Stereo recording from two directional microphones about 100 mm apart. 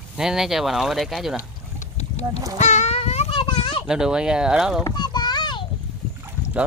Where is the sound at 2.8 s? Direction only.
90° left; by 3.8 s 60° left (ahead or behind).